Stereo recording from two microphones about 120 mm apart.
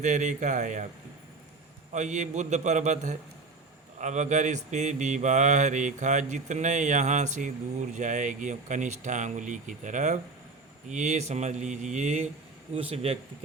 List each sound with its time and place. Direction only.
0.0 s speech: 90° right
1.9 s mantra: 80° right
10.8 s speech: 80° right
12.7 s speech: 55° right (ahead or behind)